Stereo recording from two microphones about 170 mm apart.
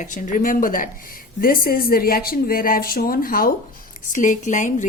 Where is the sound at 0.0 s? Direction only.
50° left (ahead or behind).